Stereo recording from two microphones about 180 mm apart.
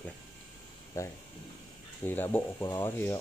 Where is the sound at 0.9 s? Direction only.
15° left (ahead or behind).